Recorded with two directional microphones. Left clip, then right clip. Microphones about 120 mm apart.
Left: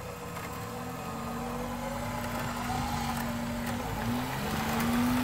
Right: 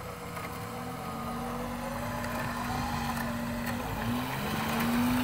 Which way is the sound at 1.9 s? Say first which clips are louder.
Even; 45° left (ahead or behind).